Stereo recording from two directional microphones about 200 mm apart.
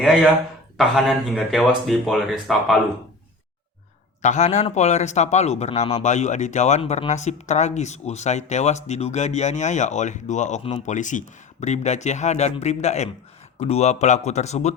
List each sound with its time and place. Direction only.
0.0 s speech: 5° right (ahead or behind)
4.2 s speech: 35° left (ahead or behind)